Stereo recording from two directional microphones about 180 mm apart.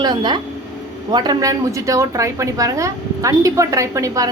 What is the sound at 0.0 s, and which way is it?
A woman's voice, 25° right (ahead or behind).